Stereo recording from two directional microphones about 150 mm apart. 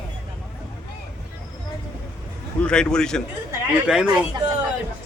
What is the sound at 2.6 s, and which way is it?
A man's voice, 5° left (ahead or behind).